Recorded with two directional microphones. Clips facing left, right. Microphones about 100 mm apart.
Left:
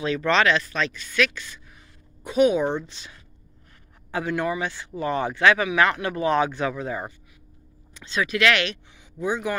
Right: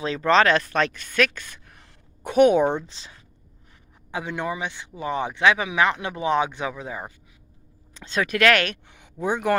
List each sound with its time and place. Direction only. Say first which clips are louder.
0.0 s speech: right 2 dB; 30° right (ahead or behind); by 2.6 s 60° right (ahead or behind)
2.8 s speech: left 1 dB; 30° right (ahead or behind)
4.1 s speech: left 3 dB; 20° right (ahead or behind)
7.9 s speech: right 1 dB; 50° right (ahead or behind)